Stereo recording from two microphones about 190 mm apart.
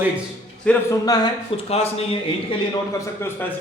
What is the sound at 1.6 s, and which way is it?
Speech, 30° left (ahead or behind).